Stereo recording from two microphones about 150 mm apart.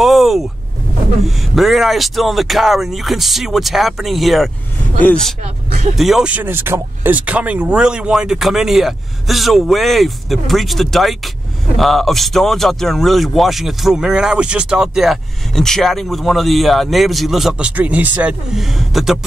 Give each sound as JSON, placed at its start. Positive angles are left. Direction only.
{"t": 0.0, "sound": "vehicle", "side_deg": 0}
{"t": 1.2, "sound": "speech", "side_deg": 0}
{"t": 5.4, "sound": "speech", "side_deg": -50}
{"t": 5.9, "sound": "speech", "side_deg": 0}